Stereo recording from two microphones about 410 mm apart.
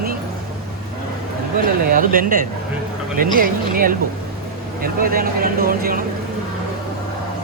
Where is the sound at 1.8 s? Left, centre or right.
Centre.